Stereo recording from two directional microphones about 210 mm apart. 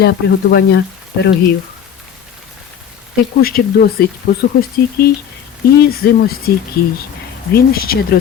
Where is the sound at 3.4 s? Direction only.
45° left (ahead or behind).